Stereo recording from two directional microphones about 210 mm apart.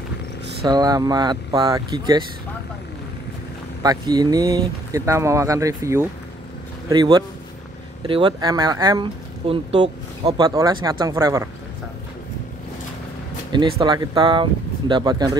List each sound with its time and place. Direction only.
0.7 s speech: 20° right (ahead or behind)
3.8 s speech: 20° right (ahead or behind)
13.5 s speech: 25° right (ahead or behind)